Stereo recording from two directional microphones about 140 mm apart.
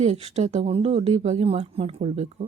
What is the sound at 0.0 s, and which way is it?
Speech, 50° right (ahead or behind).